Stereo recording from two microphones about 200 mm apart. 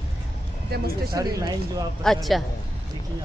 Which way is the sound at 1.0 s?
20° right (ahead or behind).